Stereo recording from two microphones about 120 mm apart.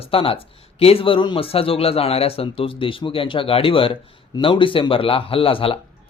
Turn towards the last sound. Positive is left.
turn(degrees=50)  # may be behind; listen again after turning